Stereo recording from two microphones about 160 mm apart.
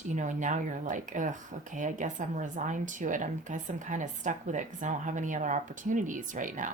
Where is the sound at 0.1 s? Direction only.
50° right (ahead or behind).